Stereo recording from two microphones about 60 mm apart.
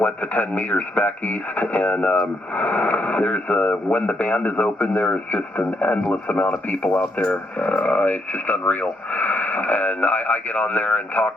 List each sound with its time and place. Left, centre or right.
0.0 s speech: left